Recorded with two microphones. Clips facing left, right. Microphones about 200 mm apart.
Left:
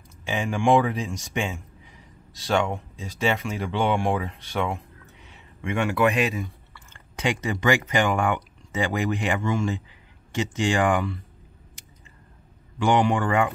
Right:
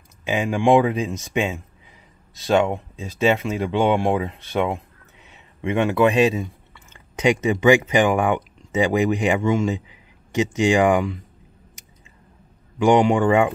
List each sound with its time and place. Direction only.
0.2 s speech: 15° right (ahead or behind)
12.7 s speech: 15° right (ahead or behind)